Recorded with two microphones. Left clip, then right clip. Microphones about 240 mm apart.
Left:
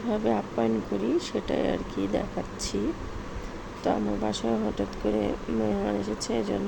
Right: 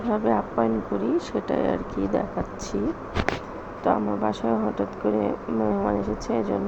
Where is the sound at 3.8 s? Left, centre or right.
Centre.